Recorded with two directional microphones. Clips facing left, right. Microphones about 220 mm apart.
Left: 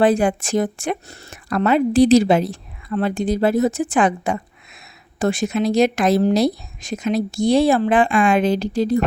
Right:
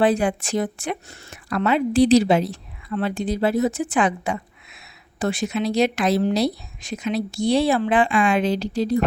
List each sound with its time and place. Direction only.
0.0 s speech: 45° left (ahead or behind)